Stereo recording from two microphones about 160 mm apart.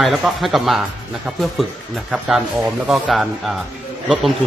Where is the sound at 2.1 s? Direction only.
Centre (ahead or behind).